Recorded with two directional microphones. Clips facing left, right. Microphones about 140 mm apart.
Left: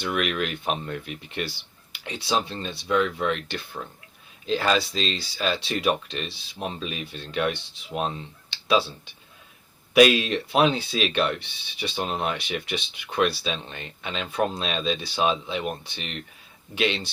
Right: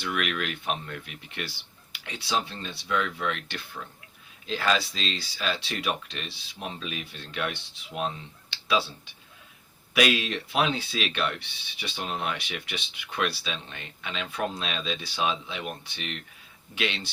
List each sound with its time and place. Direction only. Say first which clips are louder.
0.0 s speech: left 4 dB; 30° left (ahead or behind)
9.9 s speech: left 7 dB; 30° left (ahead or behind)